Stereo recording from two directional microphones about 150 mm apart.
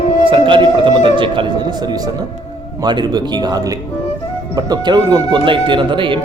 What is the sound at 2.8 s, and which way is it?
Speech, 30° right (ahead or behind).